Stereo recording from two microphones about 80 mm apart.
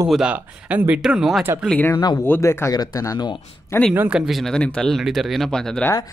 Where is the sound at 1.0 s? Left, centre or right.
Centre.